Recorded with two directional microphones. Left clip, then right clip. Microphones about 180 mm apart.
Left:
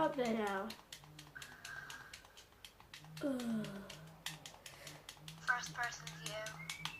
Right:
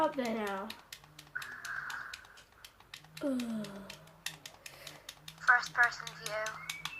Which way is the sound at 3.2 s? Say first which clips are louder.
Right 4 dB; 40° right (ahead or behind).